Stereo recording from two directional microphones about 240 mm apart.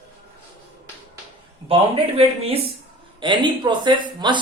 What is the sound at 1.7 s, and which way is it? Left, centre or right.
Speech, right.